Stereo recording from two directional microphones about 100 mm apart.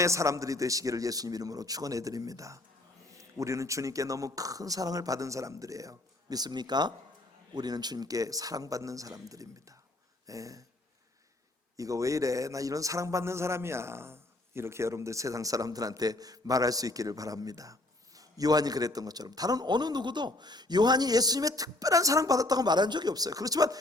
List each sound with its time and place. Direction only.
0.0 s a man's voice: 30° right (ahead or behind)
11.8 s a man's voice: 35° right (ahead or behind)